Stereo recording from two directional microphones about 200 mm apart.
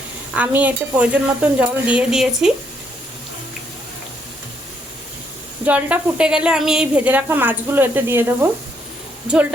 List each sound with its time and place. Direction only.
0.3 s a woman's voice: 5° right (ahead or behind)
5.6 s a woman's voice: 5° right (ahead or behind)